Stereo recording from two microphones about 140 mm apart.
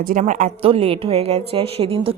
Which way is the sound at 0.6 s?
45° right (ahead or behind).